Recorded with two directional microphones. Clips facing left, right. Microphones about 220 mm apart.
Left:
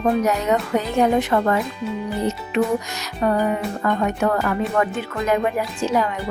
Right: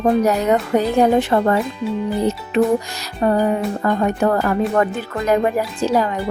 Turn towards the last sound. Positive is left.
turn(degrees=-35)  # may be behind; listen again after turning